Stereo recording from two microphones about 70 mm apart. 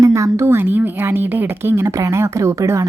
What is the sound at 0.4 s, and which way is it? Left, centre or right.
A woman's voice, right.